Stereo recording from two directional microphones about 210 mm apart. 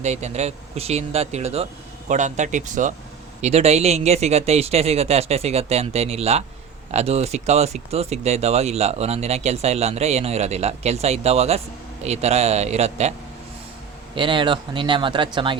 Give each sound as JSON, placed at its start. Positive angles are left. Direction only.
{"t": 0.0, "sound": "speech", "side_deg": -30}
{"t": 14.2, "sound": "speech", "side_deg": -25}